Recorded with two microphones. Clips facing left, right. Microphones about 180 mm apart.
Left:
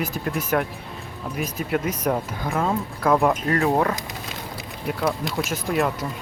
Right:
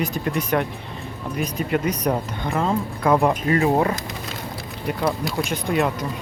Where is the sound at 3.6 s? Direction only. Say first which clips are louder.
Right 1 dB; 15° right (ahead or behind).